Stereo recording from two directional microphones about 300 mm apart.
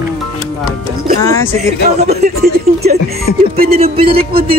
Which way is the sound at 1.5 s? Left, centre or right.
Right.